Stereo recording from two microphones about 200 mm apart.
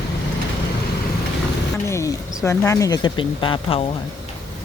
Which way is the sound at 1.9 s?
15° left (ahead or behind).